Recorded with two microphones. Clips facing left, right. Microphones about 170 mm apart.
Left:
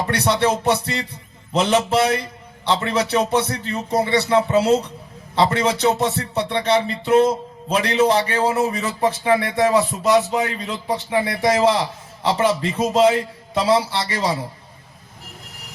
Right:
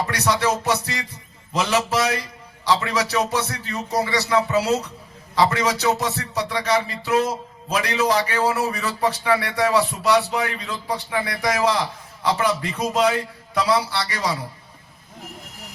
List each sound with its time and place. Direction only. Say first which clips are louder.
0.1 s music: left 5 dB; 30° left (ahead or behind)